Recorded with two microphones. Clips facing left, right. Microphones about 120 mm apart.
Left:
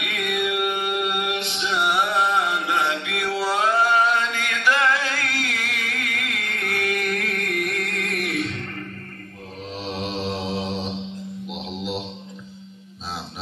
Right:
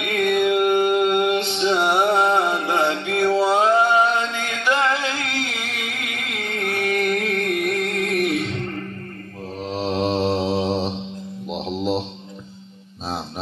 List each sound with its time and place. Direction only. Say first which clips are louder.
0.0 s music: right 7 dB; 30° right (ahead or behind)
9.7 s mantra: right 8 dB; 40° right (ahead or behind)
11.4 s a sound: right 8 dB; 35° right (ahead or behind)